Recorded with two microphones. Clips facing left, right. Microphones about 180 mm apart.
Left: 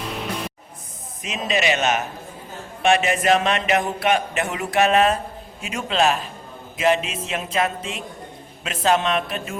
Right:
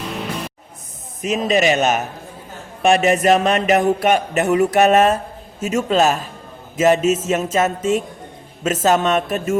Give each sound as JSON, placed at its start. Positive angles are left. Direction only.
{"t": 0.0, "sound": "music", "side_deg": 0}
{"t": 1.2, "sound": "speech", "side_deg": -40}